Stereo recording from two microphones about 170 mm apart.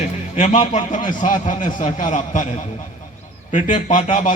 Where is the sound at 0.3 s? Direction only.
40° left (ahead or behind).